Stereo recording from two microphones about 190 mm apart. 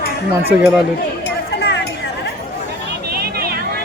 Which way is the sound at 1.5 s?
60° left (ahead or behind).